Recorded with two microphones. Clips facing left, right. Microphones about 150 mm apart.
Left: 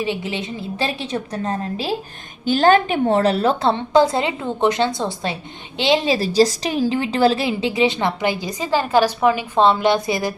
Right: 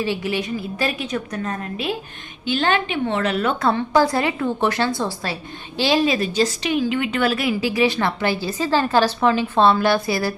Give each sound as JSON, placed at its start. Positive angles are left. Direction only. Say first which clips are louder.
{"t": 0.0, "sound": "a woman's voice", "louder": "right 1 dB", "side_deg": 20}